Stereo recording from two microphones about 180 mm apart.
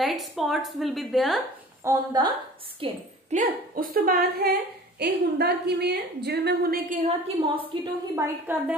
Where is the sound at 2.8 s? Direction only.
45° right (ahead or behind).